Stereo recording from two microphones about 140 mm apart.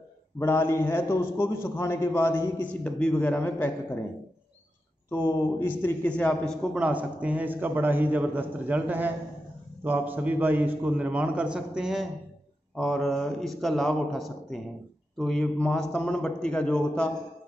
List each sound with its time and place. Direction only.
0.4 s a man's voice: 15° left (ahead or behind)
5.1 s a man's voice: 15° left (ahead or behind)